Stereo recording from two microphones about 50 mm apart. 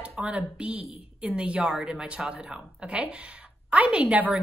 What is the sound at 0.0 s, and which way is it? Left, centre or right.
A woman's voice, right.